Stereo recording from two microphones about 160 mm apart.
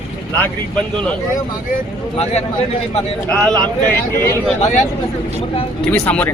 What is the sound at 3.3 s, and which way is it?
Speech, 5° left (ahead or behind).